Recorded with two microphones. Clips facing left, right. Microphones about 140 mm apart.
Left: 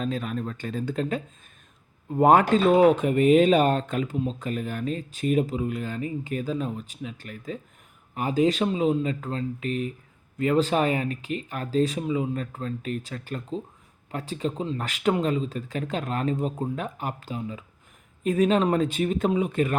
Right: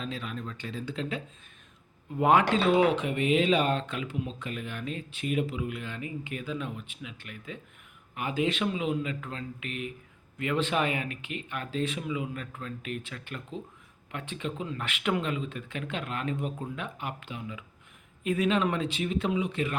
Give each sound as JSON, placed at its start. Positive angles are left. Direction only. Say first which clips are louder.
{"t": 0.0, "sound": "speech", "louder": "left 7 dB", "side_deg": 45}